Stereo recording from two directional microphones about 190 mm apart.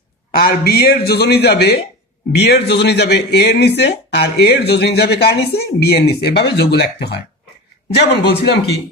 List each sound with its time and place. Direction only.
0.3 s speech: 55° left (ahead or behind)